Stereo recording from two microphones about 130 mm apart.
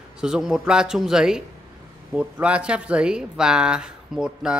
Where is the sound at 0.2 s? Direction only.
5° right (ahead or behind).